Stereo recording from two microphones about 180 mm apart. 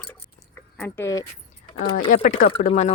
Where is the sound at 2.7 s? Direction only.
35° left (ahead or behind).